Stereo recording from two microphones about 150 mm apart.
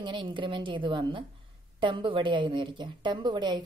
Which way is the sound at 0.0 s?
35° right (ahead or behind).